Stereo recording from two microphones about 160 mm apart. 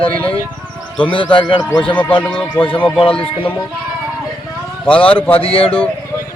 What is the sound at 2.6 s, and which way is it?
Speech, 35° left (ahead or behind).